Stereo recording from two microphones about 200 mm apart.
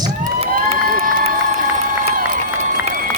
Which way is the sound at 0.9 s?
45° right (ahead or behind).